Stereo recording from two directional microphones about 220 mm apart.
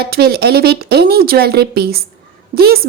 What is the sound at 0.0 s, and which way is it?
A woman's voice, 45° right (ahead or behind).